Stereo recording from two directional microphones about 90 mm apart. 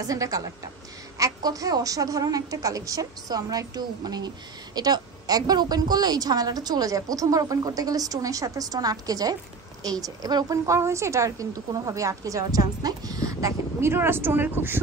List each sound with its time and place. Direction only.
0.0 s a woman's voice: 40° right (ahead or behind); by 14.8 s 25° right (ahead or behind)